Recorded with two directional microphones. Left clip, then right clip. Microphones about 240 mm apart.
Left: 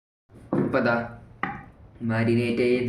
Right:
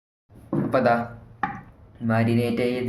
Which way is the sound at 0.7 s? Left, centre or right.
Right.